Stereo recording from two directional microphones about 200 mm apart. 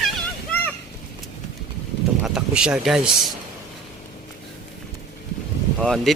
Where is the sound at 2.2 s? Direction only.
5° right (ahead or behind).